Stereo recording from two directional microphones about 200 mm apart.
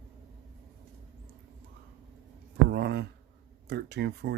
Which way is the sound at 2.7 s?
55° right (ahead or behind).